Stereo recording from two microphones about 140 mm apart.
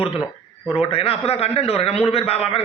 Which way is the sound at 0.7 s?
40° left (ahead or behind).